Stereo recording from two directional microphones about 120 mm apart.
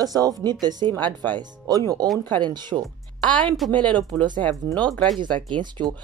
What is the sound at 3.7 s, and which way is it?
Speech, 10° left (ahead or behind).